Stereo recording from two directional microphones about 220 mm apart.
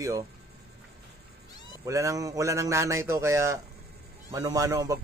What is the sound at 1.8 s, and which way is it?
Speech, 15° right (ahead or behind).